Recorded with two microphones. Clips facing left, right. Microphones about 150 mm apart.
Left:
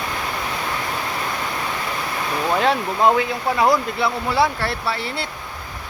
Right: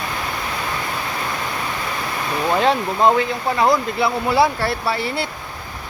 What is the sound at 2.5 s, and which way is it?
Speech, centre (ahead or behind).